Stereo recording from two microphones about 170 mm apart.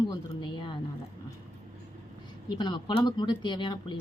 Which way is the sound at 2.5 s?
25° left (ahead or behind).